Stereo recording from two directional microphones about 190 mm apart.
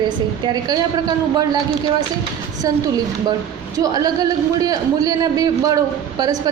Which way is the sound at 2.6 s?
20° right (ahead or behind).